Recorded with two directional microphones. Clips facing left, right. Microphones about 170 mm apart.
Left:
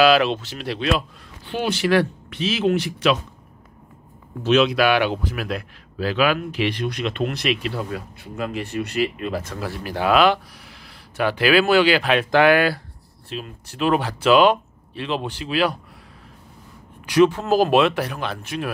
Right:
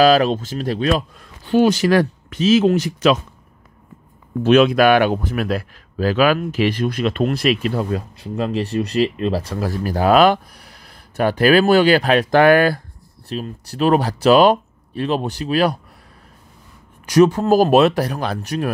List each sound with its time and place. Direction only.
0.0 s a man's voice: 45° right (ahead or behind)
4.4 s a man's voice: 50° right (ahead or behind)
17.0 s speech: 40° right (ahead or behind)